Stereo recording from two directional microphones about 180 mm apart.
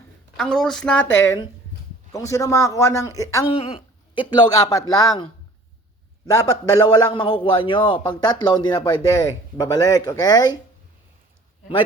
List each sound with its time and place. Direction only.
0.3 s speech: 5° left (ahead or behind)
3.5 s a man's voice: 30° left (ahead or behind)